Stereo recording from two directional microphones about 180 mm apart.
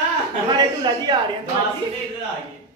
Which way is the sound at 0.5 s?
25° right (ahead or behind).